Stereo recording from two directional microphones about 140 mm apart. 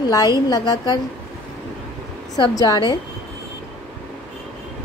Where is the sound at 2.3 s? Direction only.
25° left (ahead or behind).